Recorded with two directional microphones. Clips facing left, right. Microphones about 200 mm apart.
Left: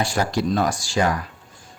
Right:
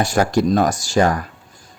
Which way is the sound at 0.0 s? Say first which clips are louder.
Right 5 dB; 45° right (ahead or behind).